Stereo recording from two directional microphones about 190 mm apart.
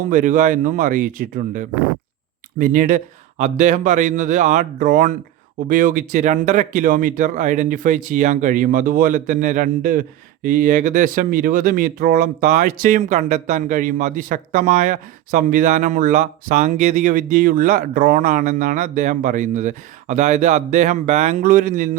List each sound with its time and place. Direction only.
0.1 s speech: 45° right (ahead or behind)